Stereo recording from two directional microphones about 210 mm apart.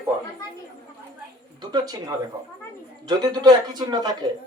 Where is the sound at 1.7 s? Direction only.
20° right (ahead or behind).